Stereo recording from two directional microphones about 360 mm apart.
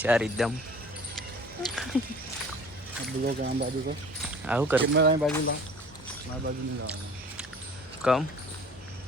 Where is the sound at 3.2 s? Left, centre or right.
Right.